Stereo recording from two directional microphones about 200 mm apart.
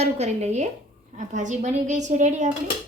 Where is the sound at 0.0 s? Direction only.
35° right (ahead or behind).